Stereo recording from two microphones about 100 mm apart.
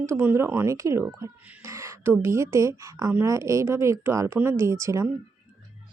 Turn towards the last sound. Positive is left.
turn(degrees=-30)  # may be behind; listen again after turning